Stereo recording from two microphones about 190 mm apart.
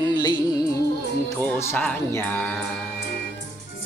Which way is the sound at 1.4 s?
10° left (ahead or behind).